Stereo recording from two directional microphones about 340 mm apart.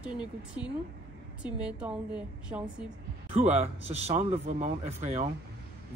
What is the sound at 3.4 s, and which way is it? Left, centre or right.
A man's voice, centre.